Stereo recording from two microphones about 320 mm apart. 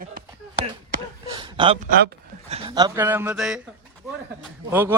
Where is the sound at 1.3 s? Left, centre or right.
Centre.